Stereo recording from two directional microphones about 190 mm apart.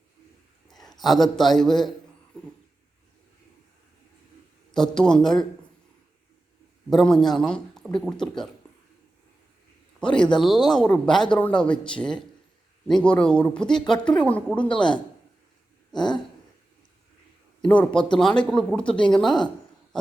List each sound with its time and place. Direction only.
0.7 s a man's voice: centre (ahead or behind)
4.7 s speech: 5° left (ahead or behind)
6.9 s speech: centre (ahead or behind)
10.0 s speech: 5° left (ahead or behind)
16.0 s a sound: 25° left (ahead or behind)
17.6 s speech: 5° left (ahead or behind)